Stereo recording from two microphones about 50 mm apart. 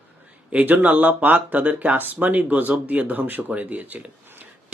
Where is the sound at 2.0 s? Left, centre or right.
Right.